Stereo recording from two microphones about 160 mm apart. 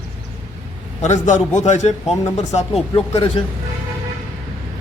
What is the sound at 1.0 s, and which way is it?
A man's voice, 45° left (ahead or behind).